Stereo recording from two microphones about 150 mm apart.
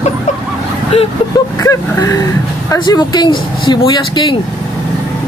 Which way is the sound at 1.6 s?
20° left (ahead or behind).